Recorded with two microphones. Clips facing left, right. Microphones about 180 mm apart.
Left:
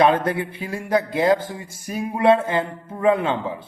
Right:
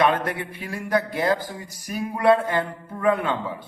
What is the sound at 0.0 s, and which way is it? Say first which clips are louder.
Speech: left 4 dB; 25° left (ahead or behind).